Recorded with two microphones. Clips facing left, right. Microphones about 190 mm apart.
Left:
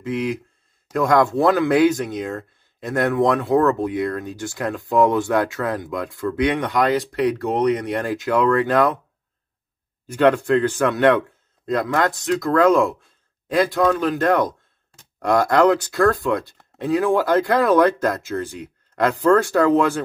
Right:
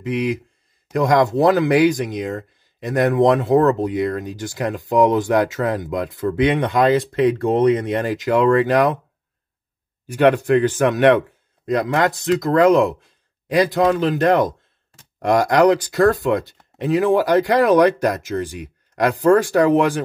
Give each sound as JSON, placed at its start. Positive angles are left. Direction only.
{"t": 0.0, "sound": "speech", "side_deg": -15}
{"t": 10.0, "sound": "speech", "side_deg": -15}